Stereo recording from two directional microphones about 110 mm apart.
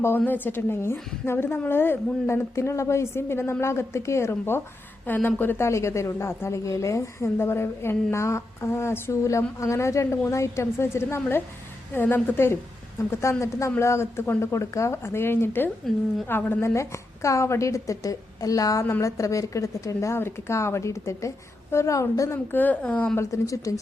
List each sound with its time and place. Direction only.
0.0 s a woman's voice: 20° left (ahead or behind)
22.5 s a woman's voice: 15° left (ahead or behind)
23.1 s a woman's voice: 30° left (ahead or behind)